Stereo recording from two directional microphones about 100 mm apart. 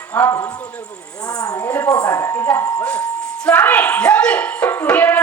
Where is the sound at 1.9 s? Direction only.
40° left (ahead or behind).